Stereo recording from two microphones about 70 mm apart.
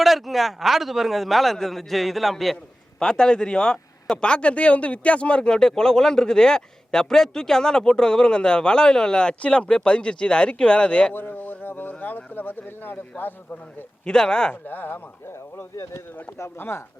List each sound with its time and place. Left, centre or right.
0.0 s a man's voice: centre
11.1 s speech: left
14.0 s a man's voice: centre
14.6 s speech: left
15.7 s speech: left